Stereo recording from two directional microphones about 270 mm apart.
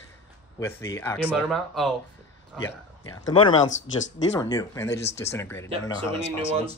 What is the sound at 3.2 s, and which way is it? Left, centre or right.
Speech, centre.